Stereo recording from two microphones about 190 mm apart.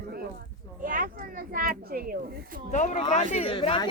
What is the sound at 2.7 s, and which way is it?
Speech, 40° left (ahead or behind).